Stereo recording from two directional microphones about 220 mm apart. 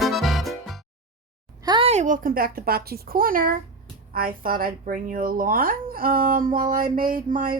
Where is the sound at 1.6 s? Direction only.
25° right (ahead or behind).